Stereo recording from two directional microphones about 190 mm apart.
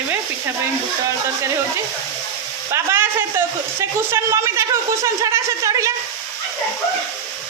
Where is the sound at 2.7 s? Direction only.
15° right (ahead or behind).